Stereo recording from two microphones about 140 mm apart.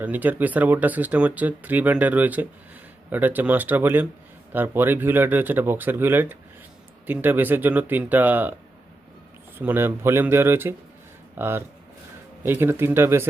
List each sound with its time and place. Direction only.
0.0 s speech: 10° right (ahead or behind)
9.6 s speech: 15° right (ahead or behind)